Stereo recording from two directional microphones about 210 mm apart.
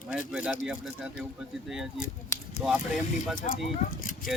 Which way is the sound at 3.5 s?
35° left (ahead or behind).